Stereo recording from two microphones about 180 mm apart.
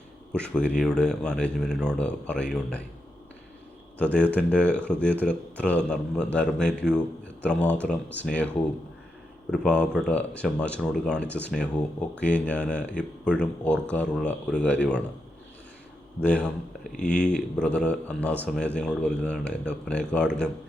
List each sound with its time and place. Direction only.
0.3 s speech: 5° left (ahead or behind)
3.9 s speech: 10° left (ahead or behind)
9.5 s speech: 5° left (ahead or behind)
16.2 s speech: 5° left (ahead or behind)